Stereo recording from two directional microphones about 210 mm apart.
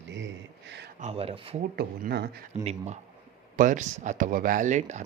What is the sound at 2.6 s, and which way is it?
Speech, 30° right (ahead or behind).